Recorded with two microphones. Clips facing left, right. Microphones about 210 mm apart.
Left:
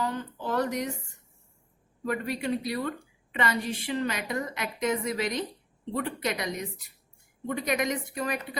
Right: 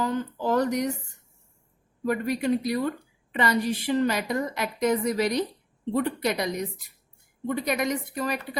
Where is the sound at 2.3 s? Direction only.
40° right (ahead or behind).